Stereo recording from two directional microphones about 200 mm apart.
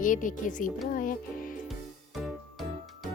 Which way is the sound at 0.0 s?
40° left (ahead or behind).